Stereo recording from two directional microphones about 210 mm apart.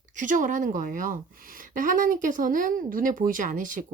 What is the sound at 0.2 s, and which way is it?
A woman's voice, 40° right (ahead or behind).